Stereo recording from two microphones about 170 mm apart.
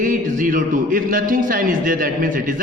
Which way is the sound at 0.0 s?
50° right (ahead or behind).